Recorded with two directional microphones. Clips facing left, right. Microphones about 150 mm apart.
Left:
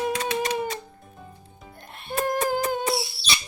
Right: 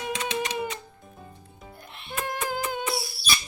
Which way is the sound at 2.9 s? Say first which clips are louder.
Left 2 dB; 25° left (ahead or behind).